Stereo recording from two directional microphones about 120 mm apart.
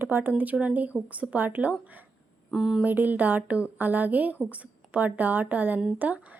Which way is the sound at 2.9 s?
15° right (ahead or behind).